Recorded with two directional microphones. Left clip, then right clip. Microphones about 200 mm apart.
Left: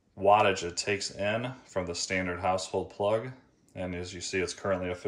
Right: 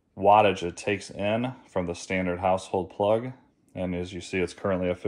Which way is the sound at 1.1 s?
35° right (ahead or behind).